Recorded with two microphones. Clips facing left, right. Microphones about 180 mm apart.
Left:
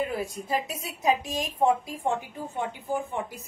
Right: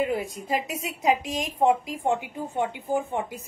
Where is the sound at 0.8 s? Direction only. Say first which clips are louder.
Right 2 dB; 20° right (ahead or behind).